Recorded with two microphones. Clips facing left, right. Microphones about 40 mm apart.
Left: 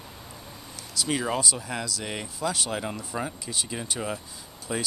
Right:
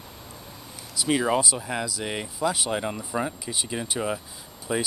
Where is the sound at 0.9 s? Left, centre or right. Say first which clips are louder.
Right 4 dB; centre.